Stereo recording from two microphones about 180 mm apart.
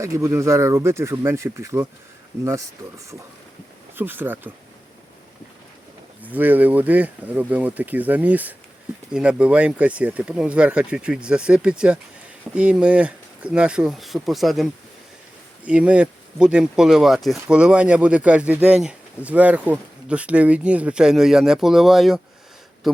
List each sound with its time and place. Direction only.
0.0 s speech: 15° right (ahead or behind)
3.9 s speech: 10° right (ahead or behind)
6.2 s speech: 10° right (ahead or behind)